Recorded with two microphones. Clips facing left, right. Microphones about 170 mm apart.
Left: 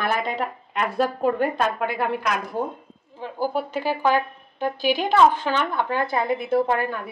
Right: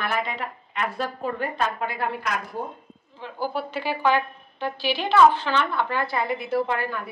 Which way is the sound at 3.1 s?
45° left (ahead or behind).